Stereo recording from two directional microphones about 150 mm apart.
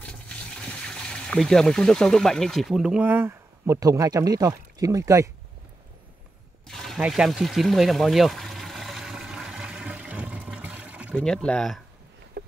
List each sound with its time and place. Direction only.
0.0 s speech: 5° left (ahead or behind); by 5.3 s 20° right (ahead or behind)
6.7 s water: centre (ahead or behind)
11.1 s speech: 5° left (ahead or behind)
12.4 s a sound: 90° right